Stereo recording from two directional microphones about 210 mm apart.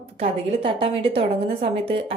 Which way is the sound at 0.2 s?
25° right (ahead or behind).